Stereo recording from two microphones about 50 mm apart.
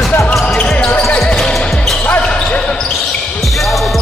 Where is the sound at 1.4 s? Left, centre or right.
Centre.